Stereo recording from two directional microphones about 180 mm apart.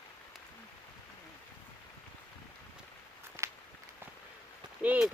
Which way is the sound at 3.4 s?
15° right (ahead or behind).